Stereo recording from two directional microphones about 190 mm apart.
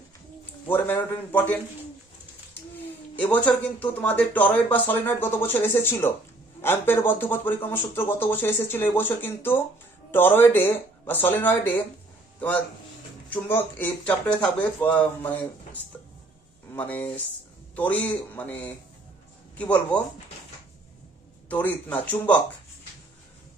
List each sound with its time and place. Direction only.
0.7 s speech: 10° left (ahead or behind)
2.7 s a man's voice: 10° left (ahead or behind)
21.5 s speech: 10° left (ahead or behind)